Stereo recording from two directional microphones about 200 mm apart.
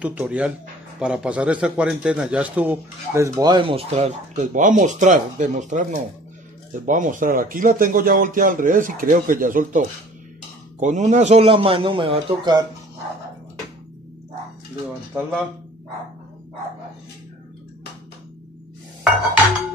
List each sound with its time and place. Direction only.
0.0 s a man's voice: 5° right (ahead or behind); by 12.6 s 25° right (ahead or behind)